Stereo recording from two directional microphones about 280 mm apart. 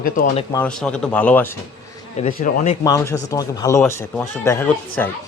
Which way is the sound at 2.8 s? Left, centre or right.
Centre.